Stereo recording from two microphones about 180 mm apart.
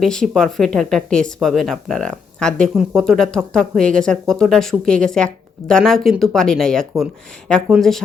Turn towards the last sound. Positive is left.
turn(degrees=0)  # may be behind; listen again after turning